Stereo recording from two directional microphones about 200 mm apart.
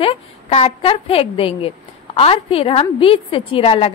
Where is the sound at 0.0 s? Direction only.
30° left (ahead or behind).